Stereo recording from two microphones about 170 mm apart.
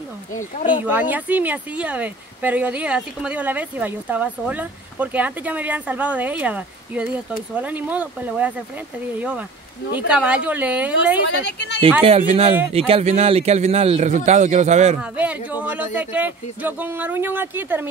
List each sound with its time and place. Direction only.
0.8 s speech: 10° right (ahead or behind)
9.9 s speech: 5° right (ahead or behind)
11.4 s speech: 90° left
12.2 s speech: 40° right (ahead or behind)
15.0 s speech: 10° right (ahead or behind)